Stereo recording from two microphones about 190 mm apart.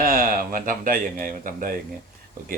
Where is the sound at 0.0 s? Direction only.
50° right (ahead or behind).